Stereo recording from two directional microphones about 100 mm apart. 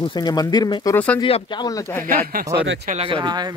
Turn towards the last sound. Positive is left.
turn(degrees=-65)  # may be behind; listen again after turning